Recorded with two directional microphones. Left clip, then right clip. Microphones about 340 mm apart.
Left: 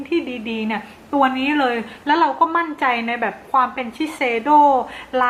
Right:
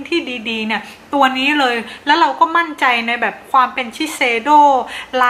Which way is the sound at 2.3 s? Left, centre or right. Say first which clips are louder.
Right 3 dB; centre.